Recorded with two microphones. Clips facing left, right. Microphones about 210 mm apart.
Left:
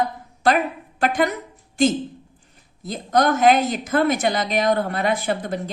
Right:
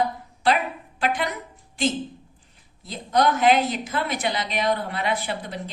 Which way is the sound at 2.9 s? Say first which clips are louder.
Left 2 dB; 45° left (ahead or behind).